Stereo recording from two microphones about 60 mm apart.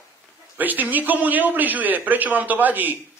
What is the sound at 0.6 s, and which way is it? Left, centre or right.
A man's voice, right.